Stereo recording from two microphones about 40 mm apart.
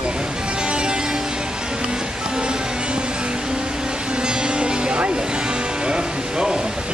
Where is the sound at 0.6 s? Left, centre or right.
Right.